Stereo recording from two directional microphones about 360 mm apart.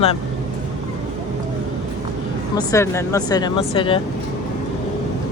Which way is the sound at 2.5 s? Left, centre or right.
Centre.